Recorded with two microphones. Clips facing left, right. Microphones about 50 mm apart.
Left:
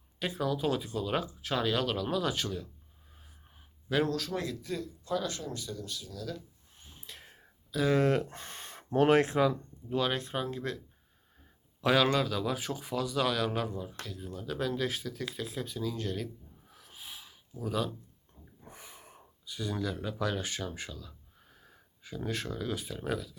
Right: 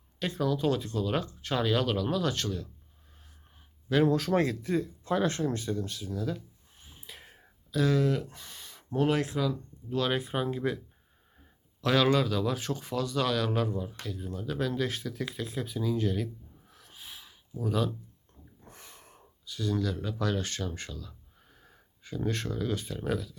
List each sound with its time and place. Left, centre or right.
0.2 s speech: centre
3.8 s speech: centre
4.3 s speech: right
6.7 s a sound: centre
7.9 s speech: left
10.1 s speech: centre
11.8 s a man's voice: centre
12.0 s speech: centre